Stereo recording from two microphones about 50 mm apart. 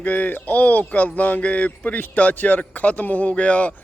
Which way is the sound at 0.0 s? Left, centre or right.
Left.